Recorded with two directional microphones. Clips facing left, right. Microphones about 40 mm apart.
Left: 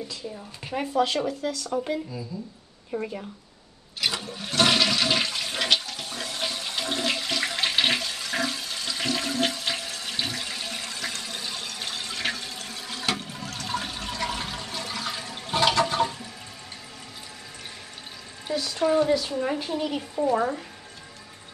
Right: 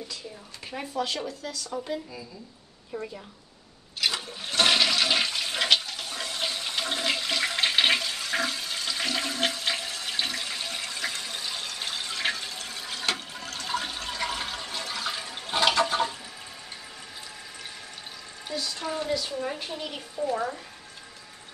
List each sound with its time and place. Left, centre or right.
0.7 s a woman's voice: left
1.7 s a woman's voice: centre
2.9 s a woman's voice: left
4.0 s toilet flush: centre
15.9 s water: centre
18.8 s a woman's voice: centre